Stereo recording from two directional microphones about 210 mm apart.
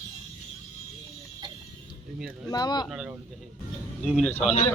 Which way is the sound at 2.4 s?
20° left (ahead or behind).